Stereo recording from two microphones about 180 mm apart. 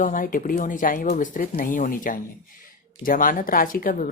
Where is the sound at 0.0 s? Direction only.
45° left (ahead or behind).